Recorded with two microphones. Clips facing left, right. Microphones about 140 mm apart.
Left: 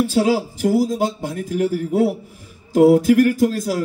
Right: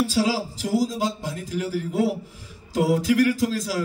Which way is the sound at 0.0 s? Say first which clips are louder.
Left 5 dB; 55° left (ahead or behind).